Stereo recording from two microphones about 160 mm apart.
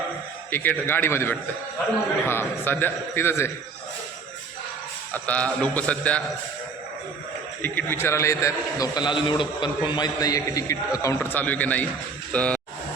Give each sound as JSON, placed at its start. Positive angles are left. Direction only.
{"t": 0.5, "sound": "a man's voice", "side_deg": 15}
{"t": 5.1, "sound": "a man's voice", "side_deg": 10}
{"t": 7.6, "sound": "a man's voice", "side_deg": 10}